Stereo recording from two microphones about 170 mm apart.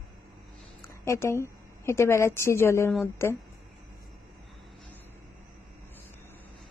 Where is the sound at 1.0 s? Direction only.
15° left (ahead or behind).